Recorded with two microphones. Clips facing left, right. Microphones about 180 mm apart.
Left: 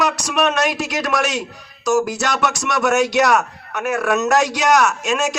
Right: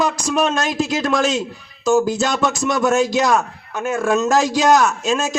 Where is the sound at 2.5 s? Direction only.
75° left (ahead or behind).